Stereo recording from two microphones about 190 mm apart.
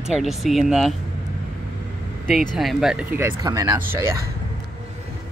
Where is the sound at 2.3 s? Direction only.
Centre (ahead or behind).